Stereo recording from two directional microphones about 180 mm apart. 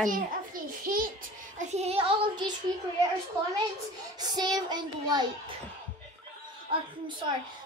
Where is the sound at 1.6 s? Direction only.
35° right (ahead or behind).